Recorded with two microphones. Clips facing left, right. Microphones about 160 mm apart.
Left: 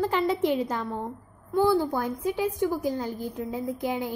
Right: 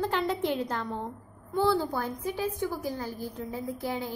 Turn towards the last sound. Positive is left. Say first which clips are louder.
# left 4 dB
turn(degrees=15)  # may be behind; listen again after turning